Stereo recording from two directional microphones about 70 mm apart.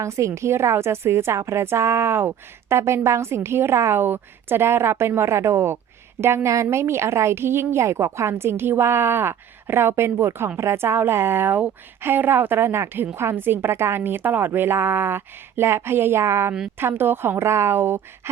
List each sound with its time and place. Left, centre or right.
0.0 s a woman's voice: right